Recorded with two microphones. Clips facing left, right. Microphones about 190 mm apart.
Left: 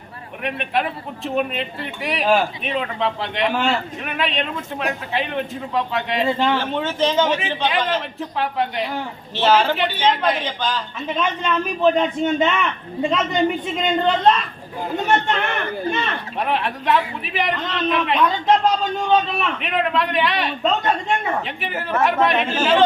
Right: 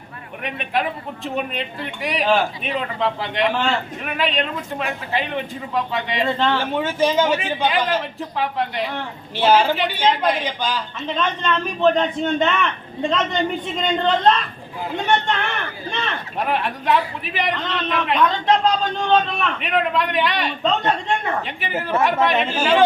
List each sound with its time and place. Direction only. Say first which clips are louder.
0.4 s a man's voice: left 1 dB; centre (ahead or behind)
6.7 s a man's voice: right 3 dB; 10° right (ahead or behind)
9.3 s a man's voice: right 1 dB; 10° right (ahead or behind)
11.2 s a woman's voice: even; 10° left (ahead or behind)
15.9 s a man's voice: left 3 dB; centre (ahead or behind)